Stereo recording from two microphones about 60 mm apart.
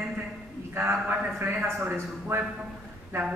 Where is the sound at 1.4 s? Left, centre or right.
Right.